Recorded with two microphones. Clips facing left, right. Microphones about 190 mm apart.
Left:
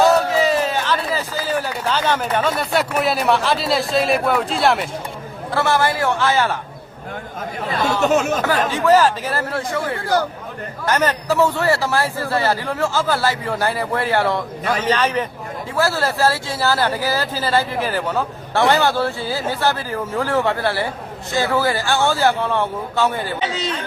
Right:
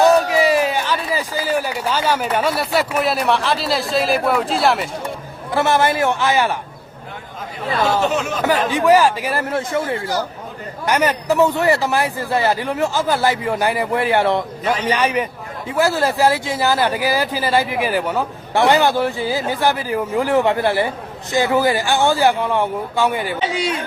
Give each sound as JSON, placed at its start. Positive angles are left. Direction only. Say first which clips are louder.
{"t": 0.0, "sound": "speech", "louder": "right 2 dB", "side_deg": -15}
{"t": 5.5, "sound": "speech", "louder": "right 2 dB", "side_deg": -20}
{"t": 8.0, "sound": "speech", "louder": "left 3 dB", "side_deg": 45}
{"t": 8.7, "sound": "speech", "louder": "right 1 dB", "side_deg": -15}